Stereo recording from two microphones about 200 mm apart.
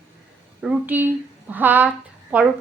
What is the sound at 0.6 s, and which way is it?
Speech, 5° right (ahead or behind).